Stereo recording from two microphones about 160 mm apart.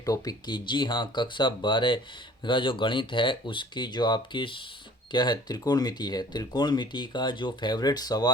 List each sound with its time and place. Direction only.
0.0 s speech: 25° left (ahead or behind)